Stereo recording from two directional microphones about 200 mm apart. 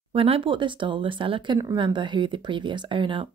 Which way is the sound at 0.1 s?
30° right (ahead or behind).